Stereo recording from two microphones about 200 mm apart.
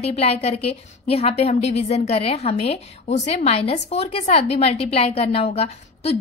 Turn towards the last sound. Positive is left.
turn(degrees=30)  # may be behind; listen again after turning